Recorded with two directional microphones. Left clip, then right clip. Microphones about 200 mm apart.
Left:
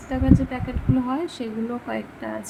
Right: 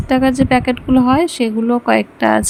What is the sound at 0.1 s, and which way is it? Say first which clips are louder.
Speech: right 10 dB; 50° right (ahead or behind).